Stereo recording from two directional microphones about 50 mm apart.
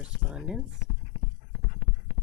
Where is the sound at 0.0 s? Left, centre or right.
Centre.